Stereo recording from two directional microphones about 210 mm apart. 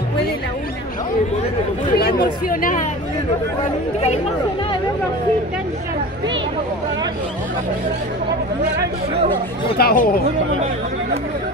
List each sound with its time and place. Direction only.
2.5 s speech: 40° left (ahead or behind)
9.1 s speech: 25° right (ahead or behind)
9.8 s speech: 45° left (ahead or behind)